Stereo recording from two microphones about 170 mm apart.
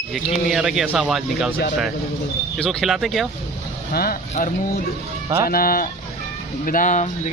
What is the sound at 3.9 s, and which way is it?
Speech, 60° left (ahead or behind).